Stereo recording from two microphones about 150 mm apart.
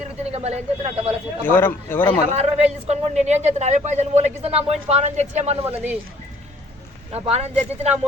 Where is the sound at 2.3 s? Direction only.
45° right (ahead or behind).